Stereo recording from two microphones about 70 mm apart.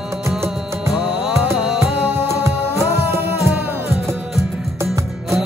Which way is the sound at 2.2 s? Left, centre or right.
Right.